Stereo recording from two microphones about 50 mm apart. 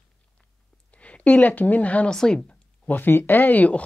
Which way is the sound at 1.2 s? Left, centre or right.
Left.